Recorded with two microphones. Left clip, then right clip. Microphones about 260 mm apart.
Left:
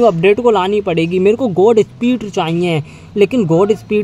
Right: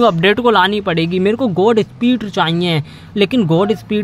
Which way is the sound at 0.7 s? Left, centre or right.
Right.